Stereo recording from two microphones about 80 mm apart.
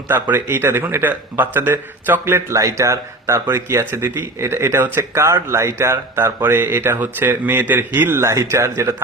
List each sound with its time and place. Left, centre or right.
0.1 s speech: right
8.2 s speech: right